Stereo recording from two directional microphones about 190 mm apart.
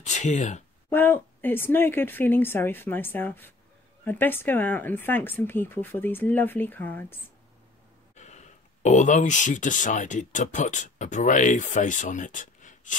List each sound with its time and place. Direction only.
0.0 s speech: 40° left (ahead or behind)
0.8 s speech: 10° left (ahead or behind)
8.2 s speech: 40° left (ahead or behind)